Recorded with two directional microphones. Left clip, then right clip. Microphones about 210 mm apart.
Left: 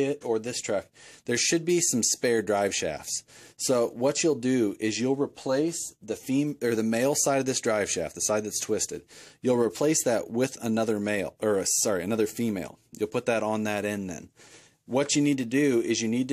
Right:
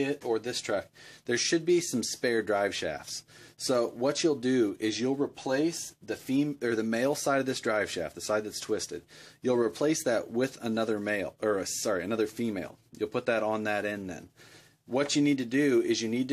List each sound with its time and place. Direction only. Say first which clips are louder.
0.0 s speech: left 3 dB; 40° left (ahead or behind)